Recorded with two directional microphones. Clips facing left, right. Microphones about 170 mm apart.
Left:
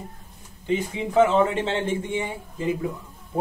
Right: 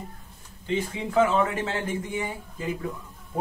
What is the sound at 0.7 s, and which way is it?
Speech, 15° left (ahead or behind).